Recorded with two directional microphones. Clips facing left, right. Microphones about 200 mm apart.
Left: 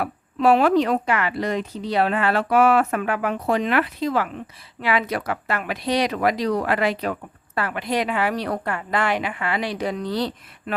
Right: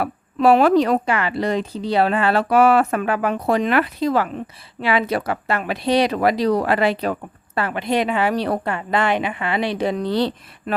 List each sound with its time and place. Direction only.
0.0 s a woman's voice: 40° right (ahead or behind)